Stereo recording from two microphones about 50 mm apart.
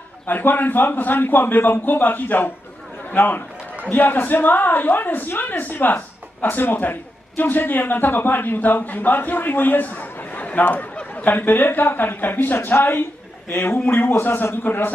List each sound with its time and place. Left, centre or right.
0.3 s a man's voice: left